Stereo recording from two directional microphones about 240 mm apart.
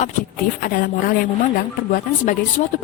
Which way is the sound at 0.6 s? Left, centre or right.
Left.